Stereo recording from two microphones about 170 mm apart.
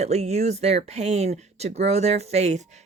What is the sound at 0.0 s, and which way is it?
Speech, 40° right (ahead or behind).